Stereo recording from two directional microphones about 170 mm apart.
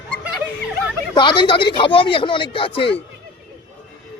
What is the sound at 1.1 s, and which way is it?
Speech, 30° left (ahead or behind).